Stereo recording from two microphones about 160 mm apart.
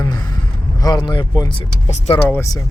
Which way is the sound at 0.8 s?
25° left (ahead or behind).